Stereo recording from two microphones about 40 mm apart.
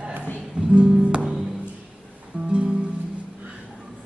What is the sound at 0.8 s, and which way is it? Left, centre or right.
Music, right.